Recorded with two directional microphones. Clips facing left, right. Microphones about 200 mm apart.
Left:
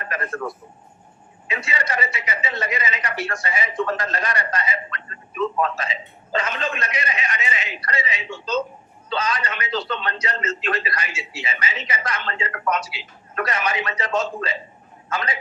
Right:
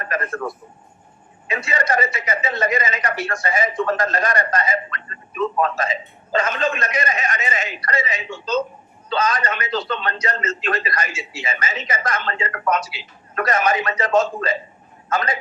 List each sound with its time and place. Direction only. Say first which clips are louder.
0.1 s a man's voice: right 4 dB; 45° right (ahead or behind)
1.5 s a man's voice: right 5 dB; 45° right (ahead or behind)